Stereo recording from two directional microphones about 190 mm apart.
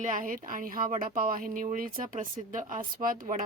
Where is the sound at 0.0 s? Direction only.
45° right (ahead or behind).